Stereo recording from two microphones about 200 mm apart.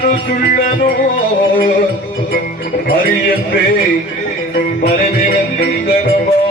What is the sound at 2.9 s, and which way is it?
Speech, 50° left (ahead or behind).